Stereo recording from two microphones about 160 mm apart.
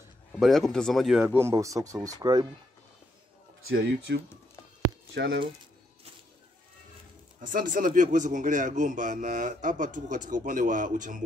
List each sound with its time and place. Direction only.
0.3 s speech: centre (ahead or behind)
1.2 s speech: 15° right (ahead or behind)
4.1 s speech: 90° right
7.3 s speech: 55° right (ahead or behind)